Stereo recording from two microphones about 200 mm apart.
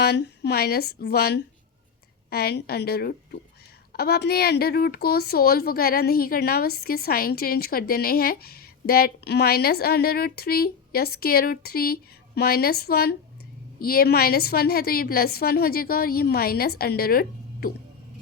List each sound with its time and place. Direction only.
0.0 s speech: 55° left (ahead or behind)